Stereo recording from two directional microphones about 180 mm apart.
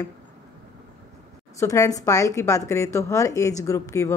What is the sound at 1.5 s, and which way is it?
Speech, 15° left (ahead or behind).